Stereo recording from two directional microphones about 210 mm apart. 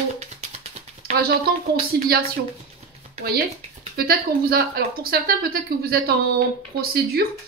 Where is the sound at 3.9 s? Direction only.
45° right (ahead or behind).